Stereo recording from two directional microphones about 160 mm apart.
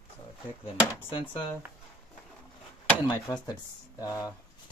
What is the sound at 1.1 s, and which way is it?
Speech, 35° left (ahead or behind).